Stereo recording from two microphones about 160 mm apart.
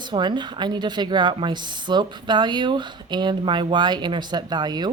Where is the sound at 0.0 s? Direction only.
30° right (ahead or behind).